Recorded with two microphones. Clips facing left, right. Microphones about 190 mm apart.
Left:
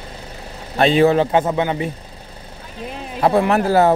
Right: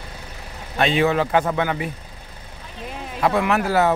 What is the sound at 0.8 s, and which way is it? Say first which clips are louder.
A man's voice: left 5 dB; 35° left (ahead or behind).